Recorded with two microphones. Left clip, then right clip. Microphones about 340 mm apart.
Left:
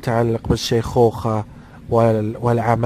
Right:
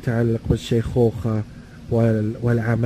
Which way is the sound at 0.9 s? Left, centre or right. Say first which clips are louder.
Left 5 dB; left.